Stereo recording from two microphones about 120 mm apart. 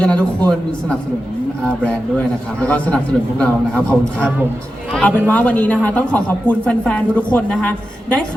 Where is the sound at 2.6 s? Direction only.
10° left (ahead or behind).